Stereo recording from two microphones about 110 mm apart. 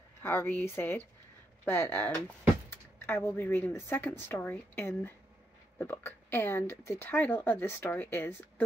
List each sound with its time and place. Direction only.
0.2 s speech: 20° left (ahead or behind)